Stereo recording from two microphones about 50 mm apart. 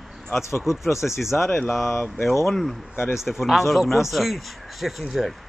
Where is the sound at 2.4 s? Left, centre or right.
Centre.